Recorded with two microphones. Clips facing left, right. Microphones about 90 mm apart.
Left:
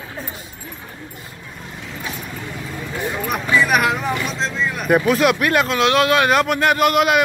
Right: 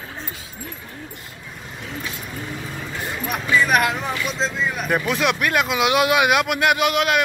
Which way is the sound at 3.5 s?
Centre (ahead or behind).